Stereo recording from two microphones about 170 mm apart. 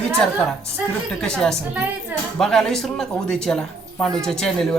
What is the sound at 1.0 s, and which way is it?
Speech, 5° left (ahead or behind).